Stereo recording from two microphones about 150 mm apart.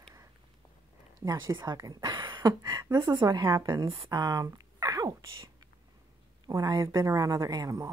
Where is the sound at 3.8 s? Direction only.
35° right (ahead or behind).